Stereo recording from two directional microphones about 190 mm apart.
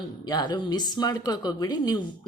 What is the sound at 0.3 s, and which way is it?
A woman's voice, 20° left (ahead or behind).